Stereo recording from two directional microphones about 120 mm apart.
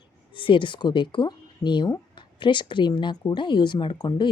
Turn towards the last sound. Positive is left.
turn(degrees=35)  # may be behind; listen again after turning